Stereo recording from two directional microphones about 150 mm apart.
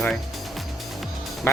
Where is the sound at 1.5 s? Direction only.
15° left (ahead or behind).